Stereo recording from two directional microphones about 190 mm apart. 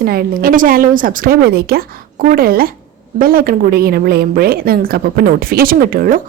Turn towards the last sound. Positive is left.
turn(degrees=-50)  # may be behind; listen again after turning